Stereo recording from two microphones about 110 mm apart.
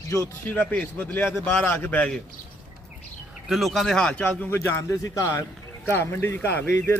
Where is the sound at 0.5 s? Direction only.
15° left (ahead or behind).